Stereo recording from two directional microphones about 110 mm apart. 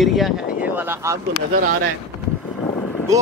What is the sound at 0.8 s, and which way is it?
Speech, 20° right (ahead or behind).